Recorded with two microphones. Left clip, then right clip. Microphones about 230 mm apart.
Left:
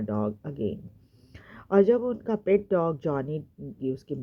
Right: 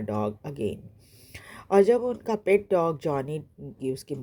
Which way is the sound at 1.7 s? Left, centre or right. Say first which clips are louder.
Right 1 dB; centre.